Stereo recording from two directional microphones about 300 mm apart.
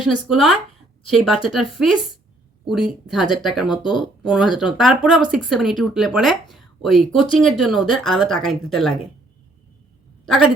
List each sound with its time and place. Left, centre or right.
0.0 s speech: centre